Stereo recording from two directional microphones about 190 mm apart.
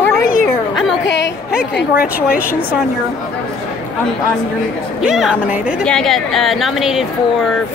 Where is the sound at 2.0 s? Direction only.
50° left (ahead or behind).